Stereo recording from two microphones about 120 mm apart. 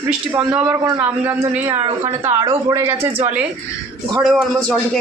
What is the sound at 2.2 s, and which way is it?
Speech, 30° right (ahead or behind).